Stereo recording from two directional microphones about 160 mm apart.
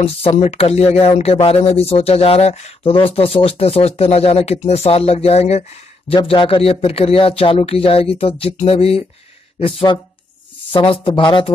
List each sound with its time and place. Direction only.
0.0 s speech: 40° left (ahead or behind)